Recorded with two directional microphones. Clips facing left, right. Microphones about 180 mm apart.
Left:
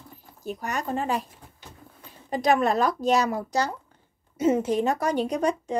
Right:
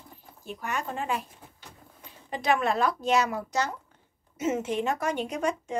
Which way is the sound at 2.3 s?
40° left (ahead or behind).